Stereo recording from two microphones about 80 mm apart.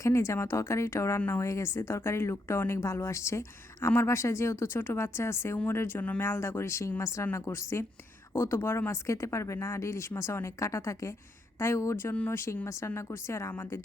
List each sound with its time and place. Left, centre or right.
0.0 s speech: left